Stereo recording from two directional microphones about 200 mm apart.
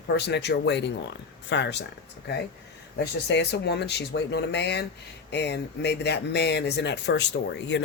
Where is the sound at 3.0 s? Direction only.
60° left (ahead or behind).